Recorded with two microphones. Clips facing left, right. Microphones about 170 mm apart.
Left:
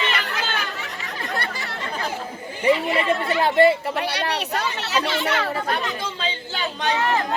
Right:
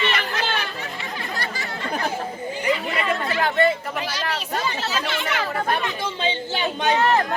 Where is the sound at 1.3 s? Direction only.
60° left (ahead or behind).